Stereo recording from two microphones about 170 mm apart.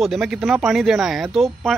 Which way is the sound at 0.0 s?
Centre (ahead or behind).